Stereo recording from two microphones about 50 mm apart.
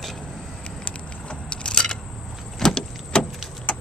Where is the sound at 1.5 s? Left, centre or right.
Centre.